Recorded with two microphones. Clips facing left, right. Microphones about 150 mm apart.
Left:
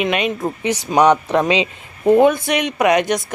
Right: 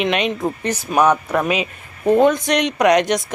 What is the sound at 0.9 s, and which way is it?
Speech, 20° left (ahead or behind).